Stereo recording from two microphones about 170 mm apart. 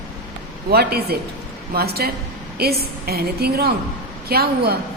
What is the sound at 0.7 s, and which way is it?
A woman's voice, 65° right (ahead or behind).